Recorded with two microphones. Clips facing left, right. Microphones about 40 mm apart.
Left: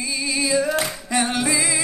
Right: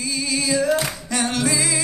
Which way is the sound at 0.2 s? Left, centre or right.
Centre.